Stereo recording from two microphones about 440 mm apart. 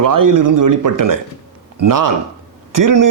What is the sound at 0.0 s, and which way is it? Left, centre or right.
Speech, right.